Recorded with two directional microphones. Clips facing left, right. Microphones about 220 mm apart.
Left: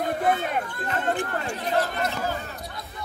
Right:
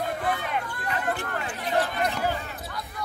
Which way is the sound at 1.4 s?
40° left (ahead or behind).